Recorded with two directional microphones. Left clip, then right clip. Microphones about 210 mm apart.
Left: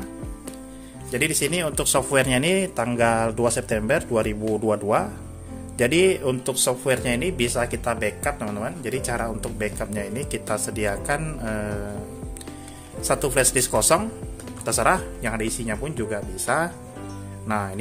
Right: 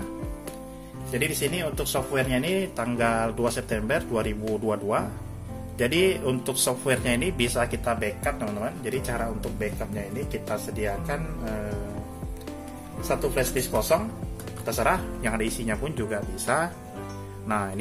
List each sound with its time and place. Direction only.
1.1 s speech: 30° left (ahead or behind)
13.1 s speech: 40° left (ahead or behind)
14.7 s speech: 30° left (ahead or behind)